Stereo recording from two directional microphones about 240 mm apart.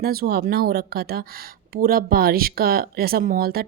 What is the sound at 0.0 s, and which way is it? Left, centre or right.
A woman's voice, right.